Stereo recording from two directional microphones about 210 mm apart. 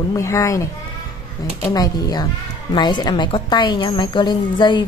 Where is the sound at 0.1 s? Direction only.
15° left (ahead or behind).